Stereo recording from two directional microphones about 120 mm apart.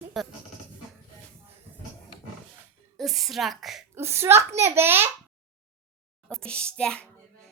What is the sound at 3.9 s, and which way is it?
A child's voice, 20° right (ahead or behind).